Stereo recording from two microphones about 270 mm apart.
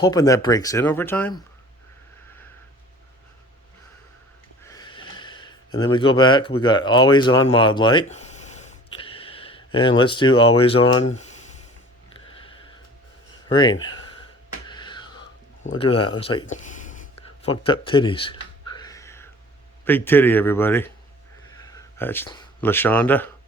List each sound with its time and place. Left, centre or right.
0.0 s speech: centre
4.6 s snort: centre
5.8 s speech: centre
12.1 s a sound: centre
13.5 s speech: centre
13.8 s a sound: centre
15.6 s speech: left
16.8 s a sound: left; by 19.3 s centre
19.8 s speech: centre